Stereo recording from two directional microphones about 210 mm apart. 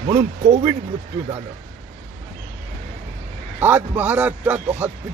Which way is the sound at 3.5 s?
10° right (ahead or behind).